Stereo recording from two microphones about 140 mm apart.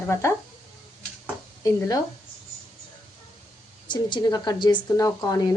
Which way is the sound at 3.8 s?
30° left (ahead or behind).